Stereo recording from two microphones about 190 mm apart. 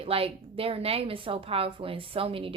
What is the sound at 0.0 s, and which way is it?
A woman's voice, 30° right (ahead or behind).